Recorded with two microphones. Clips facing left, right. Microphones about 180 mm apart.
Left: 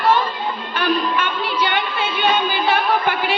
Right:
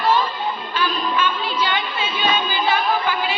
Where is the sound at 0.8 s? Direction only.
60° left (ahead or behind).